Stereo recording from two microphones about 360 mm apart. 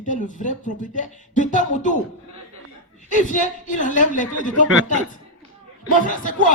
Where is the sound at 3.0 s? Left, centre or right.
Left.